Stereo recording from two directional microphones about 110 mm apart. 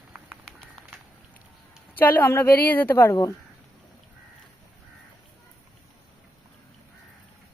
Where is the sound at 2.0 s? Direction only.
15° left (ahead or behind).